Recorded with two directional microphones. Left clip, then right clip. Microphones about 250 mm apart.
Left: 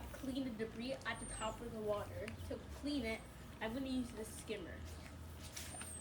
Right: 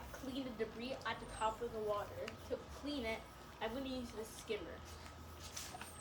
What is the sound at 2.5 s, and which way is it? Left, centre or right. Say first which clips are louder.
A woman's voice: left 1 dB; centre.